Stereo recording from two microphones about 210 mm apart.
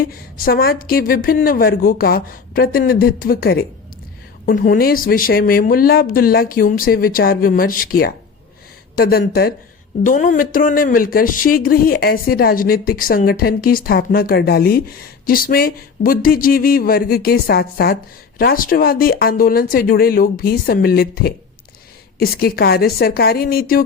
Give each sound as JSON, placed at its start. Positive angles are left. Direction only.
{"t": 0.1, "sound": "speech", "side_deg": 45}